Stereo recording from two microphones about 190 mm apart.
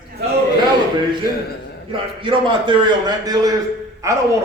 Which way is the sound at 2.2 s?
25° right (ahead or behind).